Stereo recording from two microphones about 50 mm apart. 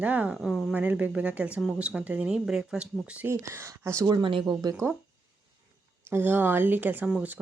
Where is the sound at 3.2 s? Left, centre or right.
Right.